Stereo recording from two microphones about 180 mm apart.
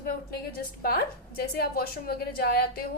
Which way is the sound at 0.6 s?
55° left (ahead or behind).